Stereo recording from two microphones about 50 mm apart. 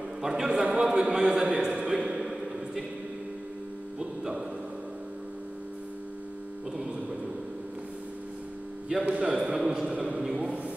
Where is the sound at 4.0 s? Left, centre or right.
Centre.